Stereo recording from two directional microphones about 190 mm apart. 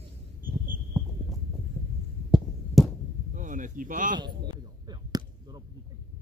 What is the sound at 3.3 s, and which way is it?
Speech, 40° right (ahead or behind).